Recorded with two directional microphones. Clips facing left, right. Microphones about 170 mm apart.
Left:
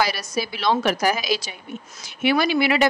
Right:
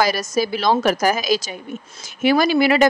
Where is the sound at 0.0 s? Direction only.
45° right (ahead or behind).